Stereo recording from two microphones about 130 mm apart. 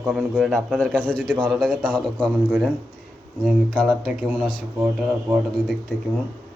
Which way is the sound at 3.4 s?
Centre (ahead or behind).